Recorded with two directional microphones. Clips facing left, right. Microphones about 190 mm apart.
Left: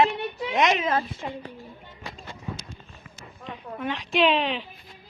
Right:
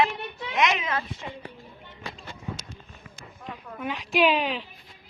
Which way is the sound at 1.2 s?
45° left (ahead or behind).